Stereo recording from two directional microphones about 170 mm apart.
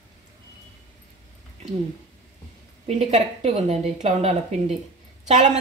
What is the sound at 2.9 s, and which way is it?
A woman's voice, 40° right (ahead or behind).